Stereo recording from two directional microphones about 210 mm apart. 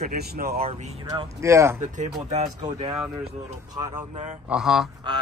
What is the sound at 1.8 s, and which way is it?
Speech, 35° right (ahead or behind).